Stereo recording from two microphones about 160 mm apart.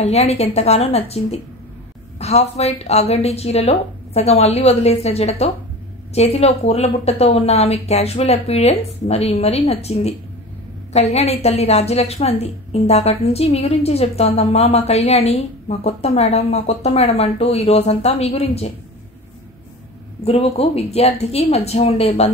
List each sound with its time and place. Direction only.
0.0 s a woman's voice: 40° left (ahead or behind)
20.2 s a woman's voice: 40° left (ahead or behind)